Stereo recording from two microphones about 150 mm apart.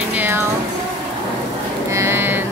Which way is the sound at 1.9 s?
15° right (ahead or behind).